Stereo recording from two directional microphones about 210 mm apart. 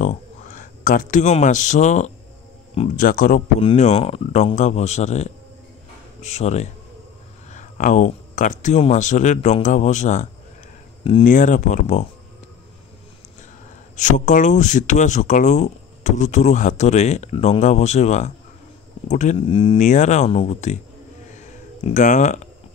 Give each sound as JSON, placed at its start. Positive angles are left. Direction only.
{"t": 0.0, "sound": "speech", "side_deg": 35}
{"t": 3.1, "sound": "speech", "side_deg": 40}
{"t": 11.2, "sound": "speech", "side_deg": 40}
{"t": 13.9, "sound": "speech", "side_deg": 35}
{"t": 21.3, "sound": "a sound", "side_deg": 35}